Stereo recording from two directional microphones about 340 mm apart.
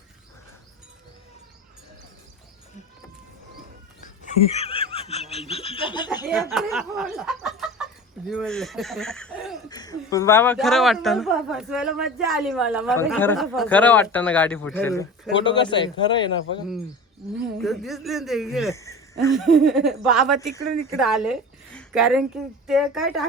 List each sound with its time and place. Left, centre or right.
4.5 s laughter: centre
6.5 s snicker: centre
8.3 s speech: centre
9.6 s a man's voice: centre
17.6 s speech: centre
19.4 s a woman's voice: centre